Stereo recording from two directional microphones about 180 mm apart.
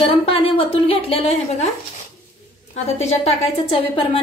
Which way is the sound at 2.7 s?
35° left (ahead or behind).